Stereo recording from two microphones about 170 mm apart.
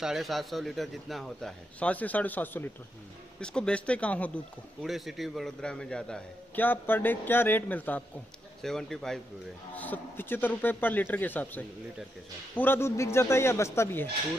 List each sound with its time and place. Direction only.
0.0 s a man's voice: centre (ahead or behind); by 14.0 s 15° left (ahead or behind)